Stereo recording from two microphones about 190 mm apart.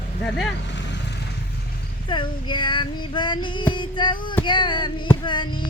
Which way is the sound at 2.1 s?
25° left (ahead or behind).